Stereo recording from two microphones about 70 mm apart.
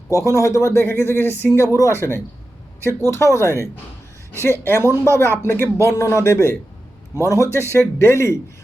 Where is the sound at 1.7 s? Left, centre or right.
Left.